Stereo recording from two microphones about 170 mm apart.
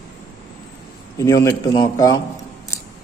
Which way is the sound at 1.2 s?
20° left (ahead or behind).